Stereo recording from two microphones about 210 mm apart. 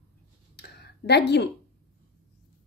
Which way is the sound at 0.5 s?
50° left (ahead or behind).